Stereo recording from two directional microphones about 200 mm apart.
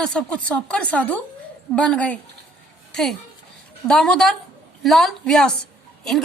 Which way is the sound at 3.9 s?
5° left (ahead or behind).